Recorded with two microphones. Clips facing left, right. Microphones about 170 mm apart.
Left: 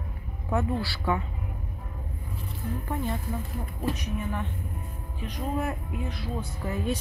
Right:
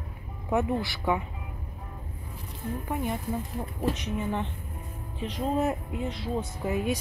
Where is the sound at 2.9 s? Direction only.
15° right (ahead or behind).